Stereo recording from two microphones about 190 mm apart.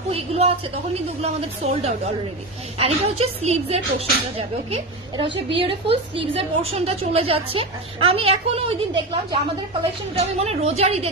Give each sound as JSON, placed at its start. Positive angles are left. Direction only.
{"t": 0.1, "sound": "a woman's voice", "side_deg": -35}